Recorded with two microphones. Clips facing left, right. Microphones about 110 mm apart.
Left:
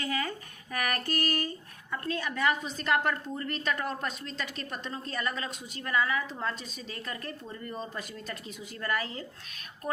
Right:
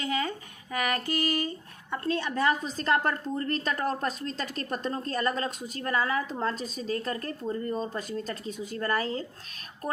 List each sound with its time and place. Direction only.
0.0 s speech: 20° right (ahead or behind); by 9.2 s 35° right (ahead or behind)